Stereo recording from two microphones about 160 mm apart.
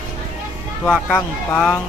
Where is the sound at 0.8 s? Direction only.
10° left (ahead or behind).